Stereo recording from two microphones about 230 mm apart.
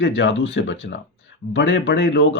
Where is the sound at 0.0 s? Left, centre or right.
Left.